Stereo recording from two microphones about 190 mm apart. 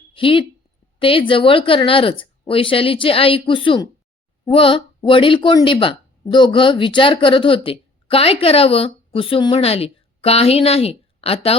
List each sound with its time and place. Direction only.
0.1 s a woman's voice: 25° left (ahead or behind)